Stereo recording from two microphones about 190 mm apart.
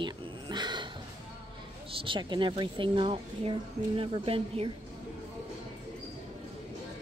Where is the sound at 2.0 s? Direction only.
25° right (ahead or behind).